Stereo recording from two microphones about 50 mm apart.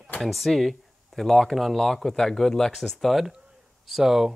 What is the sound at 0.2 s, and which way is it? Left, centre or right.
Speech, centre.